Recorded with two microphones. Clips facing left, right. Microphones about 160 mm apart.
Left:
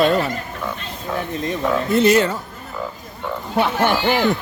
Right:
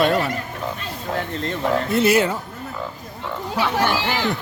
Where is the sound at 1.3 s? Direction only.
15° left (ahead or behind).